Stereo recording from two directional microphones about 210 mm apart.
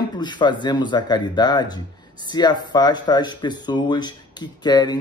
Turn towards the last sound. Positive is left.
turn(degrees=20)  # may be behind; listen again after turning